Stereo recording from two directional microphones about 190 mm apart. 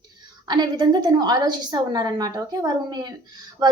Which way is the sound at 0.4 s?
20° right (ahead or behind).